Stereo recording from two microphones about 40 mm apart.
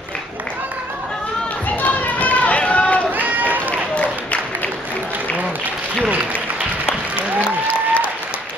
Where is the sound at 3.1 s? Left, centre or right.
Right.